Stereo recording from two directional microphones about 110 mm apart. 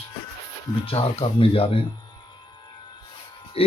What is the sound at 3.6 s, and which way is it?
Speech, 60° left (ahead or behind).